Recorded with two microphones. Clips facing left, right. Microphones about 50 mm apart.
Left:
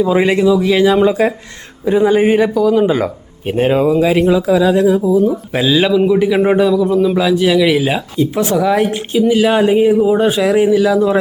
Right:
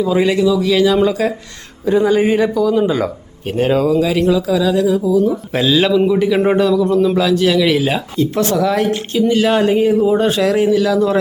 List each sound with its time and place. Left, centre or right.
0.0 s speech: left
1.8 s speech: centre
2.6 s speech: centre; by 5.3 s left
5.5 s a man's voice: centre